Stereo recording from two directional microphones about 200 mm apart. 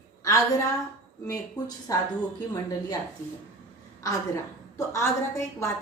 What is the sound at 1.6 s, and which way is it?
Speech, 20° left (ahead or behind).